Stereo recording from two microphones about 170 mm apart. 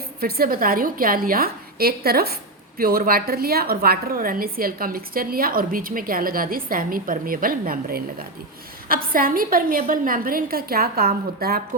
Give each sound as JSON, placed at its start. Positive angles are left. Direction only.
{"t": 0.2, "sound": "a woman's voice", "side_deg": -60}